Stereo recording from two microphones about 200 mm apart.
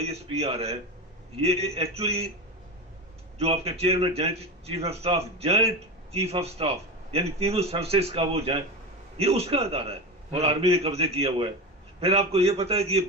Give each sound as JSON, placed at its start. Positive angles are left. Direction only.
{"t": 0.0, "sound": "a man's voice", "side_deg": -30}
{"t": 3.3, "sound": "a man's voice", "side_deg": -30}